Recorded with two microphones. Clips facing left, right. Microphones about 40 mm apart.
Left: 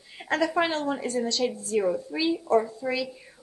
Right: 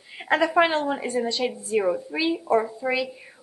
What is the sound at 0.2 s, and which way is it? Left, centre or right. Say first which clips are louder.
Speech: right 5 dB; right.